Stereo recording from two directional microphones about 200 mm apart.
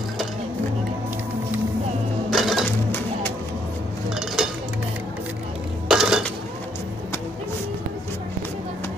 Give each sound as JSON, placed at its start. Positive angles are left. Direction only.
{"t": 2.3, "sound": "crushing", "side_deg": 0}
{"t": 4.4, "sound": "music", "side_deg": 0}
{"t": 5.9, "sound": "dishes", "side_deg": -5}